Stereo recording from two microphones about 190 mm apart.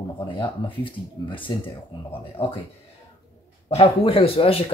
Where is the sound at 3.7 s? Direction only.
30° left (ahead or behind).